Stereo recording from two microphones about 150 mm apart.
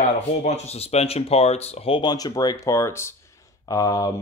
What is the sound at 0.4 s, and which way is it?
Speech, 45° left (ahead or behind).